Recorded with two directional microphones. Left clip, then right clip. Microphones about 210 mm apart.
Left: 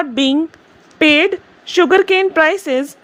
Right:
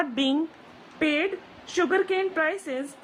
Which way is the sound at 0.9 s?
40° left (ahead or behind).